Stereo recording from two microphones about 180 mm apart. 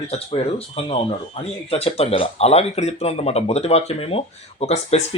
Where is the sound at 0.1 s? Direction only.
35° left (ahead or behind).